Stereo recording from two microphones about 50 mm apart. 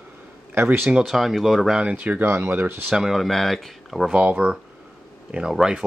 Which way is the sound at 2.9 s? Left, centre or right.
Centre.